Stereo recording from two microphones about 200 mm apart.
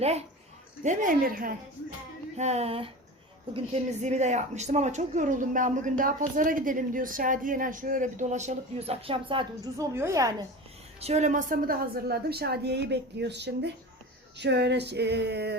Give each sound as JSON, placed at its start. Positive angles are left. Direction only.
{"t": 0.0, "sound": "a woman's voice", "side_deg": -30}
{"t": 0.9, "sound": "a woman's voice", "side_deg": -45}
{"t": 2.4, "sound": "a woman's voice", "side_deg": -30}
{"t": 9.9, "sound": "a woman's voice", "side_deg": -15}
{"t": 11.0, "sound": "a woman's voice", "side_deg": -35}
{"t": 14.3, "sound": "a sound", "side_deg": -60}